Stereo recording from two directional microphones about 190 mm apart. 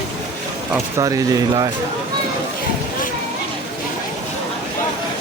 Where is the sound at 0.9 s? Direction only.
20° right (ahead or behind).